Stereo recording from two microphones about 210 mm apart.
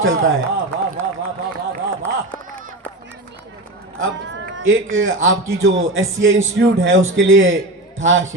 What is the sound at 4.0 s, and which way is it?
A man's voice, 65° right (ahead or behind).